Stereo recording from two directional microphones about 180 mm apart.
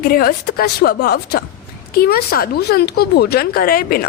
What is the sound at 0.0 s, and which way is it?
Speech, 55° left (ahead or behind).